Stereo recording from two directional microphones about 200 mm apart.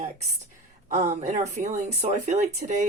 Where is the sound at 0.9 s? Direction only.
35° right (ahead or behind).